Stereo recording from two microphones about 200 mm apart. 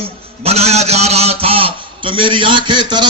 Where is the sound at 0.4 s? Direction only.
30° right (ahead or behind).